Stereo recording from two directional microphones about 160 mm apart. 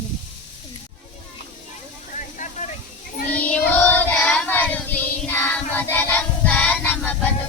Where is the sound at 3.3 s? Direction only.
10° left (ahead or behind).